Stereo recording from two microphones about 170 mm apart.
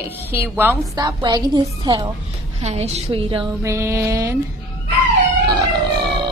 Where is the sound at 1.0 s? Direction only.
25° right (ahead or behind).